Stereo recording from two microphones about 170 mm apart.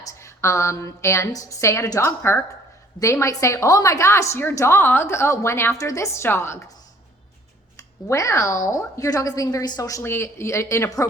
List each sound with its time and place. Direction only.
0.0 s a woman's voice: 20° left (ahead or behind)
7.8 s a woman's voice: 20° left (ahead or behind)